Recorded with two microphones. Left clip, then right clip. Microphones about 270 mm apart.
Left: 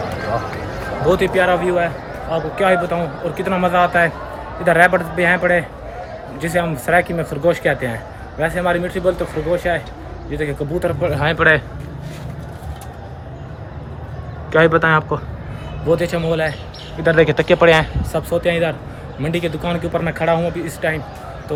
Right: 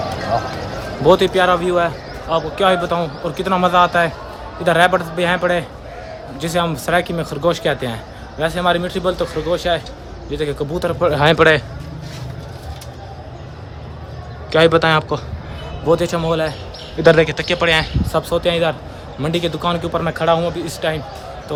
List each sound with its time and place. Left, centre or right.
1.1 s a man's voice: centre
11.1 s speech: right
11.3 s a man's voice: centre
14.5 s a man's voice: centre
17.2 s speech: centre
18.1 s a man's voice: centre